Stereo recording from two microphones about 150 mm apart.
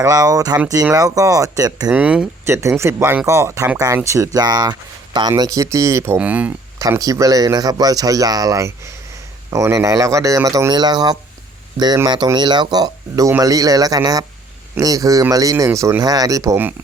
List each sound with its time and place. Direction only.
0.0 s a man's voice: 25° right (ahead or behind)
1.9 s a man's voice: 10° right (ahead or behind)
6.7 s a man's voice: 20° right (ahead or behind)